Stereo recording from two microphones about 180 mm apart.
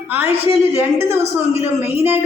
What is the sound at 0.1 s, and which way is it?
A woman's voice, 10° right (ahead or behind).